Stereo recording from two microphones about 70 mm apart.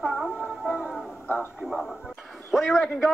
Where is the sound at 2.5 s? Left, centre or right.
Centre.